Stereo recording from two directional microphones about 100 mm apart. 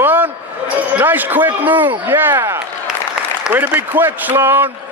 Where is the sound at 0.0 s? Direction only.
20° right (ahead or behind).